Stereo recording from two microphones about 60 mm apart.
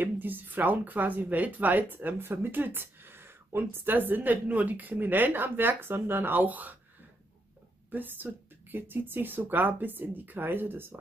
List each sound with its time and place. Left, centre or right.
0.0 s speech: right
7.9 s speech: right